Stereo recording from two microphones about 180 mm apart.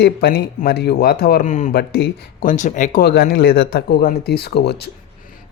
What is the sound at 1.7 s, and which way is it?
Speech, 60° left (ahead or behind).